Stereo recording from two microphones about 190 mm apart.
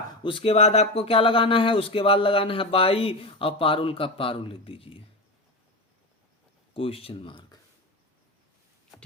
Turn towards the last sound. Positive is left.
turn(degrees=25)  # may be behind; listen again after turning